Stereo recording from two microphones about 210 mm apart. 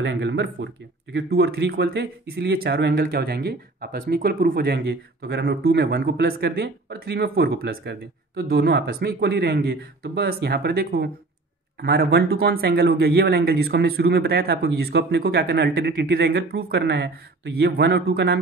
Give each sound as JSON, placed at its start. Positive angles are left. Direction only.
{"t": 0.0, "sound": "speech", "side_deg": -60}